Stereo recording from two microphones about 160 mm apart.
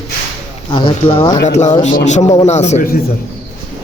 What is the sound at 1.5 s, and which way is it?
A man's voice, 45° left (ahead or behind).